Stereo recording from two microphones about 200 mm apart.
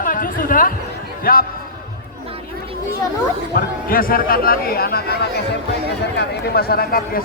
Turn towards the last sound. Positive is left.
turn(degrees=50)  # may be behind; listen again after turning